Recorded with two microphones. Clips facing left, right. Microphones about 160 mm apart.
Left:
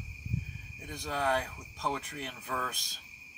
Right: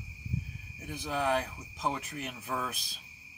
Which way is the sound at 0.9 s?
5° right (ahead or behind).